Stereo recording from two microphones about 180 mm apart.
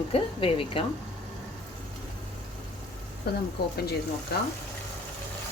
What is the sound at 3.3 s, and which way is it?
Speech, 60° left (ahead or behind).